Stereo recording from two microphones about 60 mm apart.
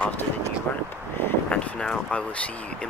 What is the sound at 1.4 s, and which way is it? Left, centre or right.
Speech, centre.